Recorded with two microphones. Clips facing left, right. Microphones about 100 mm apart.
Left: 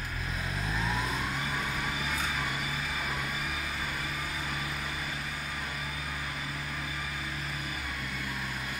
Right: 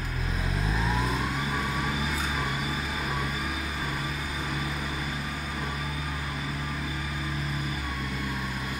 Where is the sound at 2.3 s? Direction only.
20° right (ahead or behind).